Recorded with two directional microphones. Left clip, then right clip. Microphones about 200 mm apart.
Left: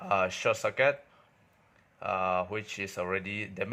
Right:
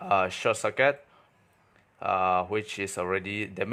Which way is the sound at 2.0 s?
20° right (ahead or behind).